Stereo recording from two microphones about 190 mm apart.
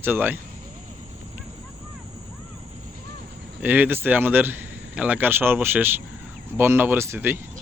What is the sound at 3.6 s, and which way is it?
Speech, 10° right (ahead or behind).